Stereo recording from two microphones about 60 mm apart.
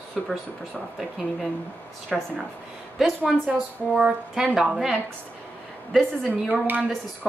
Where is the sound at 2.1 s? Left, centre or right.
Centre.